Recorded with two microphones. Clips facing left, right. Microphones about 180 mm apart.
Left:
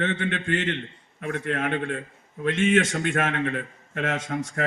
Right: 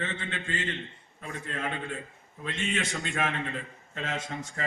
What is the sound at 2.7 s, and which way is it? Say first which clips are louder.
A man's voice: left 10 dB; 50° left (ahead or behind).